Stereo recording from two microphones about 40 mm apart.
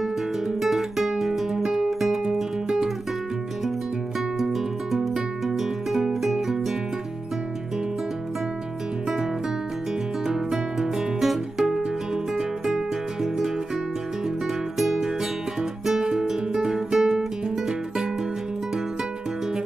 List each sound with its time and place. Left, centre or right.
0.6 s guitar: centre
1.9 s music: centre
4.4 s music: centre
10.2 s music: centre
14.8 s music: centre
15.8 s guitar: centre